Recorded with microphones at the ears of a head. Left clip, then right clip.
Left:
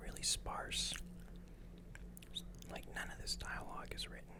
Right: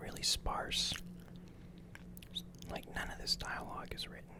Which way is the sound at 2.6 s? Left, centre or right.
Right.